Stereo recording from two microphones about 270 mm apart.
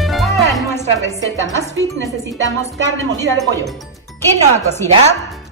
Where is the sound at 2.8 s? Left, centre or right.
Right.